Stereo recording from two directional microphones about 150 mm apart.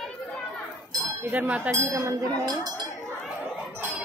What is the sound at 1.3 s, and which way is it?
Speech, 10° right (ahead or behind).